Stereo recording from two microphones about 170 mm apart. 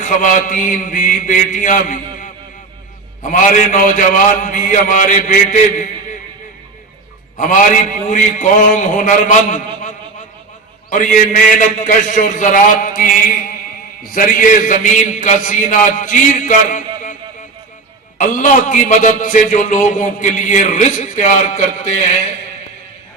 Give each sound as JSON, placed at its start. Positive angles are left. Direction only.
{"t": 0.0, "sound": "a man's voice", "side_deg": 50}
{"t": 7.3, "sound": "a man's voice", "side_deg": 50}
{"t": 18.2, "sound": "a man's voice", "side_deg": 50}